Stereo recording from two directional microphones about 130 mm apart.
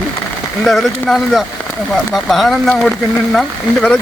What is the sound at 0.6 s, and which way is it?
Speech, centre (ahead or behind).